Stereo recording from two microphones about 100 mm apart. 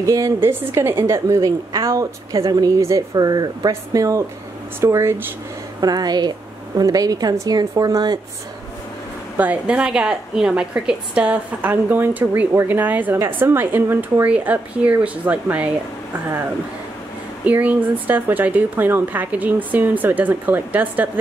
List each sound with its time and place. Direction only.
0.0 s a woman's voice: 30° right (ahead or behind)
5.8 s a woman's voice: 40° right (ahead or behind)
9.4 s a woman's voice: 15° right (ahead or behind)
17.5 s a woman's voice: 15° right (ahead or behind)